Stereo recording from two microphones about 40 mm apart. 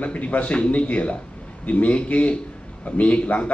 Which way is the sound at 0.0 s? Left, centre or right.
Left.